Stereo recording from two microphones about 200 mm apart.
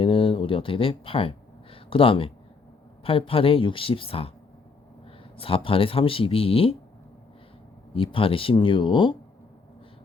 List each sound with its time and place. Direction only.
0.0 s a sound: 25° left (ahead or behind)
3.0 s speech: 25° left (ahead or behind)
5.4 s speech: 25° left (ahead or behind)
7.9 s speech: 25° left (ahead or behind)